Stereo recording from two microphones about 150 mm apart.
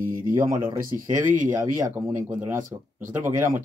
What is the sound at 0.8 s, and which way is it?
Speech, 65° right (ahead or behind).